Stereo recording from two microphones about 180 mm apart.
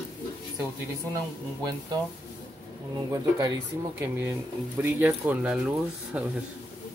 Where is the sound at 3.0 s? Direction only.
20° right (ahead or behind); by 6.2 s 5° right (ahead or behind).